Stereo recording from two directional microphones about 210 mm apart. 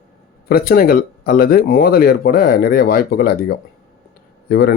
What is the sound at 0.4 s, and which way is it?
Speech, 45° left (ahead or behind).